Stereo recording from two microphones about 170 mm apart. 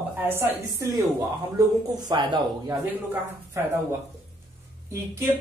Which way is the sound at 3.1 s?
15° right (ahead or behind).